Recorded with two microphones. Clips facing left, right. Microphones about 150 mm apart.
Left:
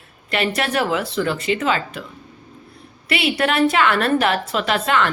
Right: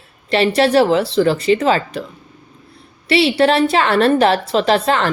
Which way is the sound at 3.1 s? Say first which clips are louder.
Right 7 dB; 30° right (ahead or behind).